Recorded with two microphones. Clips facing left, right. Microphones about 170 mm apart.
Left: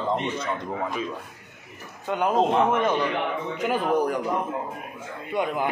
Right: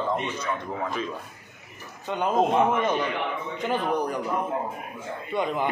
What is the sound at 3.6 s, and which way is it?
Speech, 10° left (ahead or behind).